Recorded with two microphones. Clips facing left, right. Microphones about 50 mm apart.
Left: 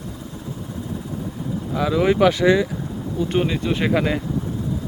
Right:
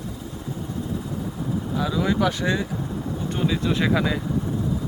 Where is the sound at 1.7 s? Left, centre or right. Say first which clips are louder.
Left 6 dB; left.